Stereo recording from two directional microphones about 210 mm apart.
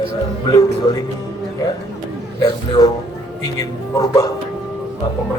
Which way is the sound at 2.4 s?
20° left (ahead or behind).